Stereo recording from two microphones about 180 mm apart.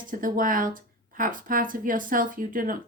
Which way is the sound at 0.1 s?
50° right (ahead or behind).